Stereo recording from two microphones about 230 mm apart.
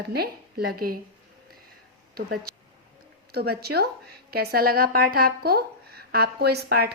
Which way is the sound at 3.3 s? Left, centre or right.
Right.